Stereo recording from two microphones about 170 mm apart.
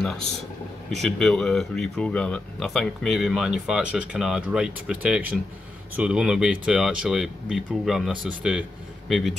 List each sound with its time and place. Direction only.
0.9 s speech: centre (ahead or behind)